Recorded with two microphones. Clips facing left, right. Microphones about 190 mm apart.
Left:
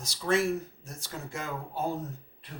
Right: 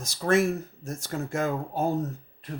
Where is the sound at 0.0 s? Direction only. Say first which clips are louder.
Right 4 dB; 50° right (ahead or behind).